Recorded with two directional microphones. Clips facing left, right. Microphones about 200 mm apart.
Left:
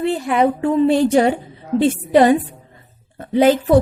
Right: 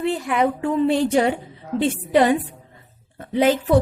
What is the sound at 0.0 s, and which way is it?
A woman's voice, 30° left (ahead or behind).